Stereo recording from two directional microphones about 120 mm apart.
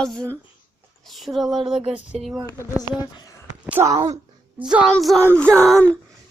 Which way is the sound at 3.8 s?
30° right (ahead or behind).